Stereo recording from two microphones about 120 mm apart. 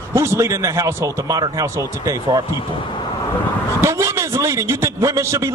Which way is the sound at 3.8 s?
25° right (ahead or behind).